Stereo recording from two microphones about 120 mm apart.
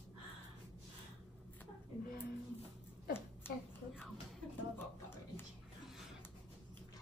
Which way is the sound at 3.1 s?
20° left (ahead or behind).